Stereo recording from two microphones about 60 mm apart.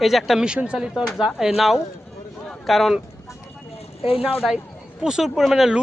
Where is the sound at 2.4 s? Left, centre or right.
Centre.